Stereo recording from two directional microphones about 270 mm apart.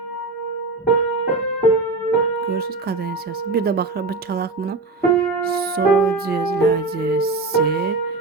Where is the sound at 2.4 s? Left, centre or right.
Right.